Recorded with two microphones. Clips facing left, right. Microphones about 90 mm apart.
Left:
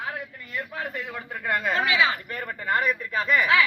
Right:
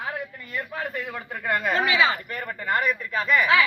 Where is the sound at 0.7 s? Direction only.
5° left (ahead or behind).